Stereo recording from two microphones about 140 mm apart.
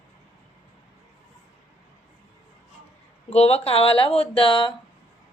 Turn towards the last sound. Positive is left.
turn(degrees=40)  # may be behind; listen again after turning